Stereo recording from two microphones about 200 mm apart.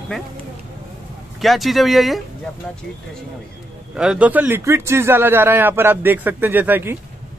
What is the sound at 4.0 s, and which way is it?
A man's voice, 5° right (ahead or behind).